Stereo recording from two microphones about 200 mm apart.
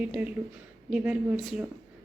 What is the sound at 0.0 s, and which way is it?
Speech, 5° right (ahead or behind).